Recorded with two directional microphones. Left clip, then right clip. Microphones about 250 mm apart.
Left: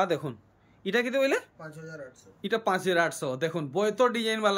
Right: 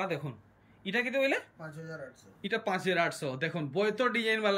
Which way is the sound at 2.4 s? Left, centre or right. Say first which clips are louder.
Left 5 dB; centre.